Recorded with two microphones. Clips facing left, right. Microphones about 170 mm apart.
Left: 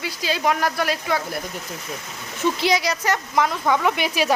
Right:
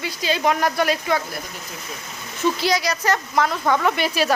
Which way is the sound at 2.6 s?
25° left (ahead or behind).